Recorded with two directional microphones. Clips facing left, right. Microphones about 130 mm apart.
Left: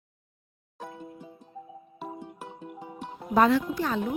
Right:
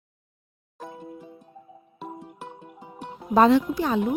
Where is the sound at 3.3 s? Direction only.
25° right (ahead or behind).